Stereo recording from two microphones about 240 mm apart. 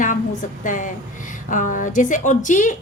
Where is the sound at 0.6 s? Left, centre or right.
Left.